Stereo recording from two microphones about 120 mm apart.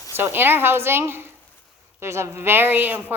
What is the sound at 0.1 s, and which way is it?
A woman's voice, 15° right (ahead or behind).